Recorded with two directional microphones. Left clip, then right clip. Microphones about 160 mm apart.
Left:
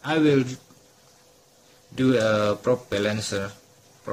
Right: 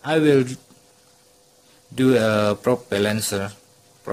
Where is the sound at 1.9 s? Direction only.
60° right (ahead or behind).